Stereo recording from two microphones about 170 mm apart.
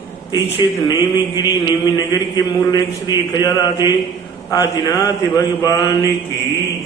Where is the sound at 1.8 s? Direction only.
20° left (ahead or behind).